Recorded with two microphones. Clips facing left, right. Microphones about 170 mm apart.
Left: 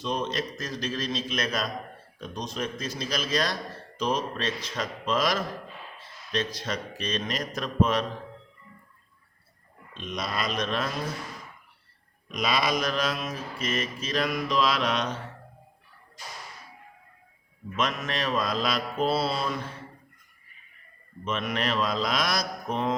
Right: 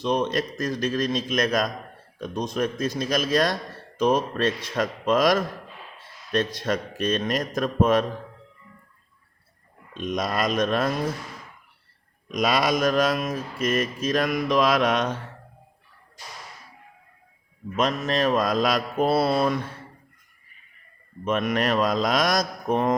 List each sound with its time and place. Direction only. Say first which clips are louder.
0.0 s a man's voice: right 6 dB; 60° right (ahead or behind)
6.3 s mantra: right 6 dB; 55° right (ahead or behind)
10.0 s mantra: right 6 dB; 45° right (ahead or behind)
12.3 s mantra: right 4 dB; 45° right (ahead or behind)
17.7 s mantra: right 6 dB; 40° right (ahead or behind); by 19.5 s 55° right (ahead or behind)
21.2 s mantra: right 6 dB; 50° right (ahead or behind)